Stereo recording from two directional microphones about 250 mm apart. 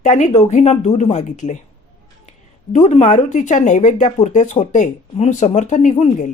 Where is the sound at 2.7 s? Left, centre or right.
Left.